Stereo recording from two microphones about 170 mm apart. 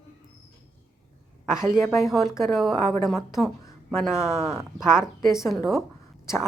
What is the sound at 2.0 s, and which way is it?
Speech, centre (ahead or behind).